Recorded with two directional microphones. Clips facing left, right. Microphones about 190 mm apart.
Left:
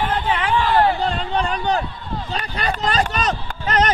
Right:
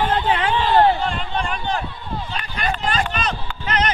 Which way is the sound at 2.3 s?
40° left (ahead or behind).